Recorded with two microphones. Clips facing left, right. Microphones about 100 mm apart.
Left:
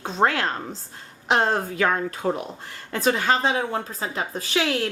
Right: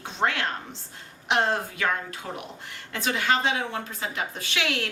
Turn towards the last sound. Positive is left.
turn(degrees=35)  # may be behind; listen again after turning